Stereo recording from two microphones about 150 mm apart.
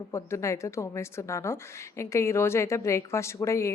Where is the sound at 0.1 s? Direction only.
20° left (ahead or behind).